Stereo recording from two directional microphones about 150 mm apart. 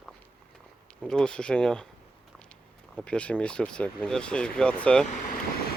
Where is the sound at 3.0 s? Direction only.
10° left (ahead or behind).